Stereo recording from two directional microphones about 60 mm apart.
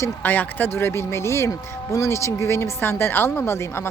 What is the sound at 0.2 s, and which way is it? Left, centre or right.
A woman's voice, left.